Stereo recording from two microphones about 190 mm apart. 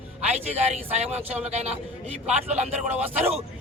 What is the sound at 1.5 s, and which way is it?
Speech, 35° right (ahead or behind).